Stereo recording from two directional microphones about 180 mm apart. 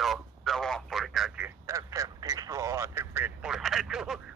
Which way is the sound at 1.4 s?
15° right (ahead or behind).